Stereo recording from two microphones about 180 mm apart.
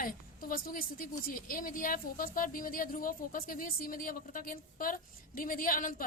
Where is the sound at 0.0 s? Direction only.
50° left (ahead or behind).